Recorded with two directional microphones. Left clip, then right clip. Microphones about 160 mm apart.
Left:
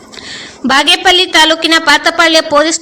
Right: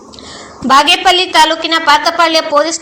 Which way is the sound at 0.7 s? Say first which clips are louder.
Even; 25° left (ahead or behind).